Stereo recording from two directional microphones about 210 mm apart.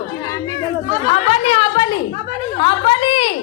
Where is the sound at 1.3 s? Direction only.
25° left (ahead or behind).